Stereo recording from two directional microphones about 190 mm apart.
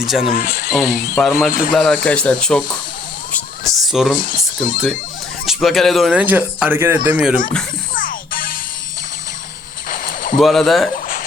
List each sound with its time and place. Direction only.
0.0 s speech: centre (ahead or behind)
0.3 s speech: 50° left (ahead or behind)
0.8 s speech: 15° left (ahead or behind)
1.2 s speech: centre (ahead or behind)
1.5 s speech: 45° left (ahead or behind)
1.7 s speech: centre (ahead or behind)
4.2 s speech: 45° left (ahead or behind)
5.5 s speech: centre (ahead or behind)
7.9 s music: 45° left (ahead or behind)
9.9 s a sound: 45° left (ahead or behind)
10.3 s speech: centre (ahead or behind)